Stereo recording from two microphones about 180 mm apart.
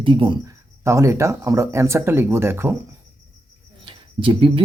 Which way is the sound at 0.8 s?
15° right (ahead or behind).